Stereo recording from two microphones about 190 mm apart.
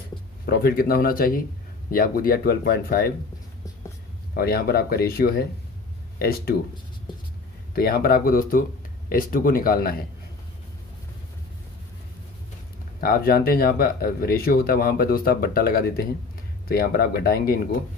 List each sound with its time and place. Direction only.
0.5 s speech: 55° left (ahead or behind)
4.3 s speech: 55° left (ahead or behind)
7.7 s speech: 50° left (ahead or behind)
13.0 s speech: 55° left (ahead or behind)